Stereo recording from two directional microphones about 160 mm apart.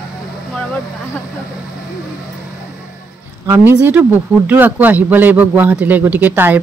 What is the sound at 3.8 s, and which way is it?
Speech, 10° right (ahead or behind).